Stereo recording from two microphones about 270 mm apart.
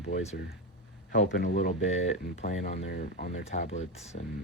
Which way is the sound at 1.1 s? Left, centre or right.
Left.